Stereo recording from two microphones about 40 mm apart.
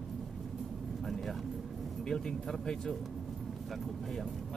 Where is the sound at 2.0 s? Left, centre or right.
Centre.